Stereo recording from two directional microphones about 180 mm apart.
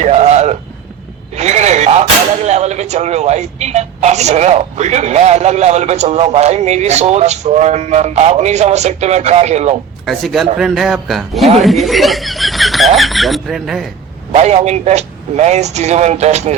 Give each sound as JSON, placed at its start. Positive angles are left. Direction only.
{"t": 0.0, "sound": "a sound", "side_deg": -40}
{"t": 2.5, "sound": "speech", "side_deg": -40}
{"t": 10.1, "sound": "speech", "side_deg": 0}
{"t": 14.3, "sound": "speech", "side_deg": -40}